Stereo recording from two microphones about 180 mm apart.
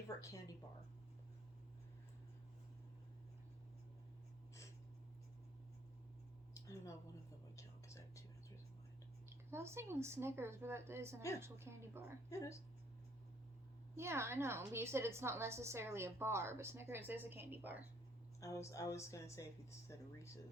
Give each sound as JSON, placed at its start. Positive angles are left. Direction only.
{"t": 0.2, "sound": "speech", "side_deg": 20}
{"t": 6.5, "sound": "a sound", "side_deg": 15}
{"t": 7.5, "sound": "whispering", "side_deg": 15}
{"t": 9.5, "sound": "a woman's voice", "side_deg": -15}
{"t": 12.3, "sound": "speech", "side_deg": 15}
{"t": 13.9, "sound": "a woman's voice", "side_deg": -15}
{"t": 18.6, "sound": "speech", "side_deg": 15}